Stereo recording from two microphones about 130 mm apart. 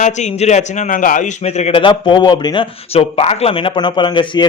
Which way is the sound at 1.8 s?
40° left (ahead or behind).